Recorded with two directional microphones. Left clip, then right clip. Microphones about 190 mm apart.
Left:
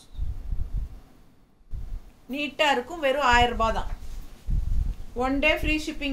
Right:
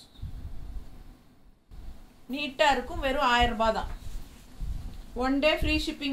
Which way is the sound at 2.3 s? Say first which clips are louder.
Left 1 dB; 20° left (ahead or behind).